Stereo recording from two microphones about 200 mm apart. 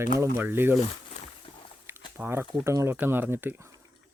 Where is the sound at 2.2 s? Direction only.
10° right (ahead or behind).